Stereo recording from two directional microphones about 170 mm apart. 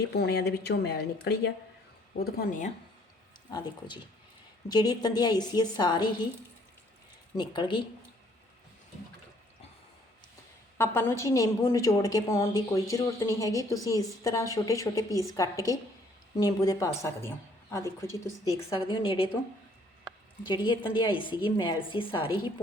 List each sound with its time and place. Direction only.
0.1 s speech: 75° left (ahead or behind)
2.1 s speech: 65° left (ahead or behind); by 2.7 s 50° left (ahead or behind)
3.5 s a woman's voice: 25° left (ahead or behind)
7.3 s a woman's voice: 25° left (ahead or behind)
10.8 s a woman's voice: 15° left (ahead or behind)
18.8 s a woman's voice: 30° left (ahead or behind)
20.4 s a woman's voice: 25° left (ahead or behind)